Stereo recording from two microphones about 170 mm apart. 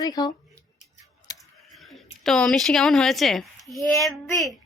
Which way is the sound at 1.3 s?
Centre (ahead or behind).